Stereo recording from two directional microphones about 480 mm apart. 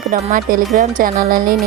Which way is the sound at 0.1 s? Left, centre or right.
Centre.